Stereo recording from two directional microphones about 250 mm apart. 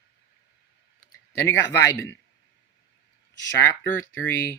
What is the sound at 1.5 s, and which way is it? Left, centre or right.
Speech, centre.